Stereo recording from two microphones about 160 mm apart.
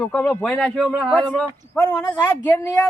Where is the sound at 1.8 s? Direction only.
10° left (ahead or behind).